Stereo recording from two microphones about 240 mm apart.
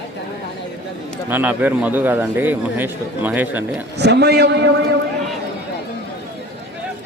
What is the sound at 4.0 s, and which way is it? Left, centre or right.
Speech, right.